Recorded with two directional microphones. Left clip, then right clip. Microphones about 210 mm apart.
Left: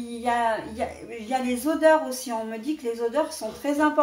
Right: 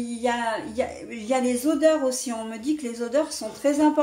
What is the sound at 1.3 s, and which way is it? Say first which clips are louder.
A woman's voice: right 3 dB; 45° right (ahead or behind).